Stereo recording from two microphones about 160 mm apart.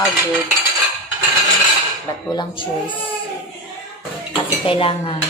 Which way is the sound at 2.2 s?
30° left (ahead or behind).